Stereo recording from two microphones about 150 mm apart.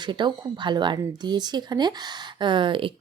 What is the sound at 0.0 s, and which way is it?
A woman's voice, 30° right (ahead or behind).